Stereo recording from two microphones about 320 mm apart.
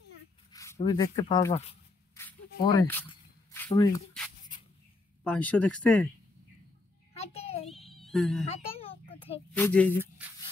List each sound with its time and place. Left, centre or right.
0.5 s speech: centre
2.8 s speech: centre
5.2 s speech: centre
7.2 s a sound: centre
7.7 s baby cry: centre
8.5 s a sound: centre
9.5 s speech: centre